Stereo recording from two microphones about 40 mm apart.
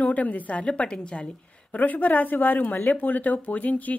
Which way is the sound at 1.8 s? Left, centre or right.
Left.